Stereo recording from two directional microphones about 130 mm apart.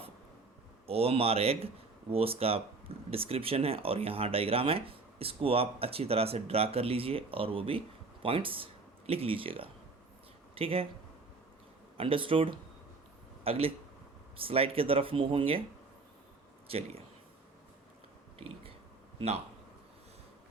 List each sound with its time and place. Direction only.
0.9 s speech: 50° right (ahead or behind)
11.9 s speech: 45° right (ahead or behind)
16.6 s speech: 50° right (ahead or behind)